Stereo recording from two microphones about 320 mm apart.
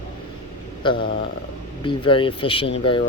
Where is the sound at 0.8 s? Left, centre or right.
Centre.